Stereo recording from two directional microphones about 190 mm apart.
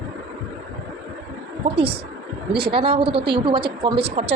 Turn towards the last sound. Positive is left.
turn(degrees=-30)  # may be behind; listen again after turning